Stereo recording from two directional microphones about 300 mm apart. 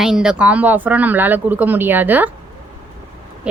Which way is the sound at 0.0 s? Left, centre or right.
Centre.